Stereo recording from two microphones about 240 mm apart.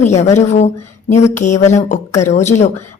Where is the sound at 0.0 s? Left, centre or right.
Left.